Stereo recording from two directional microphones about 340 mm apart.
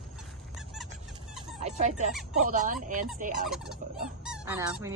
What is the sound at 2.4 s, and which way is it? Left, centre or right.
Speech, right.